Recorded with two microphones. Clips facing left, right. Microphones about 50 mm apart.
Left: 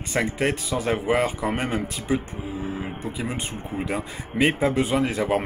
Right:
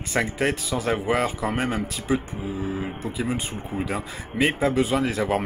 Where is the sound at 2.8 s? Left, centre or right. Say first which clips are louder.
Right 1 dB; centre.